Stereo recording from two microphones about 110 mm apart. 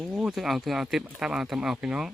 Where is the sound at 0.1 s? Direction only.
5° right (ahead or behind).